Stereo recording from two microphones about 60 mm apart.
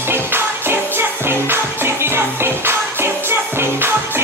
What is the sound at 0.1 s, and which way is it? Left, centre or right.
Music, right.